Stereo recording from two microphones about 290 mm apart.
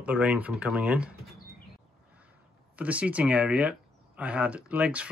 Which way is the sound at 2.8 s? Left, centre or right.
Centre.